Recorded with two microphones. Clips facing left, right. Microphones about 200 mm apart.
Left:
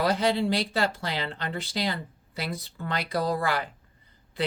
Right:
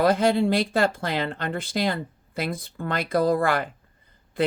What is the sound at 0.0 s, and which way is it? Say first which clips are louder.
Speech: right 5 dB; 50° right (ahead or behind).